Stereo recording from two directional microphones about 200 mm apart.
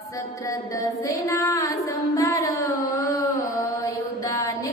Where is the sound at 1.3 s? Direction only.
15° left (ahead or behind).